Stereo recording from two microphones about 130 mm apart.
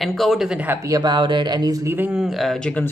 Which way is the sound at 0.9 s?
35° right (ahead or behind).